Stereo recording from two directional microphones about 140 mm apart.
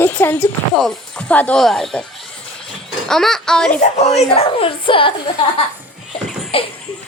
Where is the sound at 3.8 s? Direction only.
50° left (ahead or behind).